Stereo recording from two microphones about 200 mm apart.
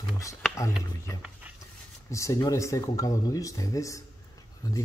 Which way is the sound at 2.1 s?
15° left (ahead or behind).